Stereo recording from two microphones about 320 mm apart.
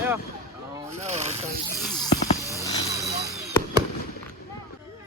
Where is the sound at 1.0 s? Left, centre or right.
Right.